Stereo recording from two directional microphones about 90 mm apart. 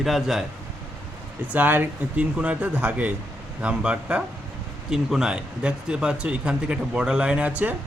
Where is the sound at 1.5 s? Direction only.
20° right (ahead or behind).